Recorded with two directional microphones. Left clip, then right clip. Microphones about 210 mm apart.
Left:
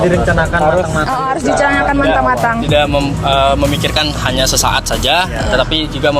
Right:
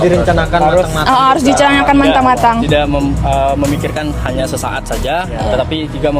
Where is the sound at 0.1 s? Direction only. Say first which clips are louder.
Right 1 dB; 30° right (ahead or behind).